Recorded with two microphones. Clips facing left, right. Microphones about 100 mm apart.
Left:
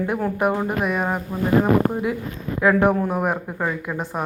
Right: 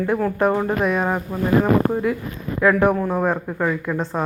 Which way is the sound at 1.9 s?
20° left (ahead or behind).